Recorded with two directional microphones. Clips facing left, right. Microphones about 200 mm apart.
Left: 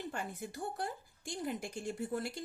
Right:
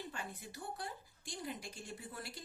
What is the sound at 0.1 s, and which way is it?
A woman's voice, 50° left (ahead or behind).